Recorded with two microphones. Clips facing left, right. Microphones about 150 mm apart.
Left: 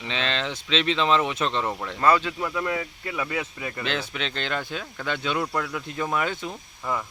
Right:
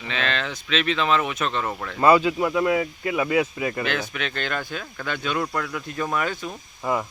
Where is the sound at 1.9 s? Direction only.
10° right (ahead or behind).